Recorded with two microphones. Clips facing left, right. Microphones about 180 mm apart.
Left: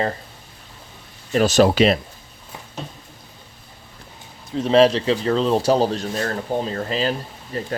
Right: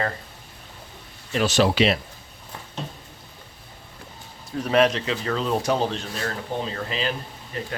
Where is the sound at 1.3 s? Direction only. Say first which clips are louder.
Left 5 dB; 45° left (ahead or behind).